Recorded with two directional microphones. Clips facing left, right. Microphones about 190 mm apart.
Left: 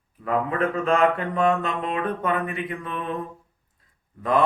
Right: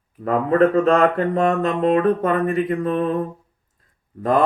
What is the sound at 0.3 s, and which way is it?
Mantra, 40° right (ahead or behind).